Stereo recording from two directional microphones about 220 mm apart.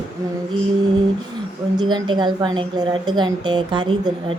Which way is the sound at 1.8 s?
20° right (ahead or behind).